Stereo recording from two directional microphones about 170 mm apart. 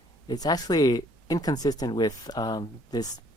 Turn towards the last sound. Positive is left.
turn(degrees=25)  # may be behind; listen again after turning